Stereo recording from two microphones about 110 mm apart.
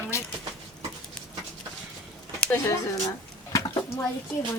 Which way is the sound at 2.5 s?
25° left (ahead or behind).